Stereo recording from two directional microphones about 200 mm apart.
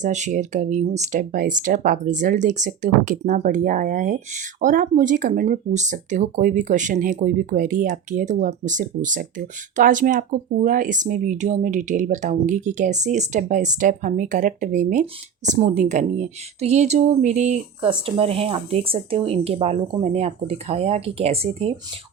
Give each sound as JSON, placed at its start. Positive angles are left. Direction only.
{"t": 0.0, "sound": "speech", "side_deg": -35}